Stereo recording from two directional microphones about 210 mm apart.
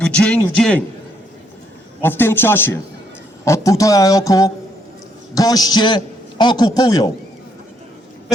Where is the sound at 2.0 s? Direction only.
10° left (ahead or behind).